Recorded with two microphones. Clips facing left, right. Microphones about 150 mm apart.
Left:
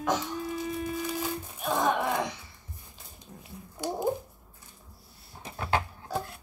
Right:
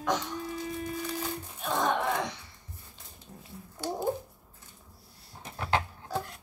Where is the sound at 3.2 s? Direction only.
15° left (ahead or behind).